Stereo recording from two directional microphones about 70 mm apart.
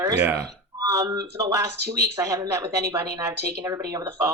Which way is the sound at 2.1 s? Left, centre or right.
Right.